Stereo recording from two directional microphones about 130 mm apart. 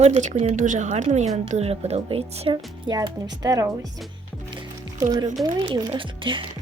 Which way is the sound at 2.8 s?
30° right (ahead or behind).